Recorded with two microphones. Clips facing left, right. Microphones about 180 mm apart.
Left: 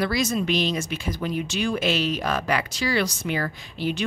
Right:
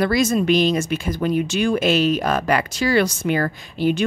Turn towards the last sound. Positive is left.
turn(degrees=-50)  # may be behind; listen again after turning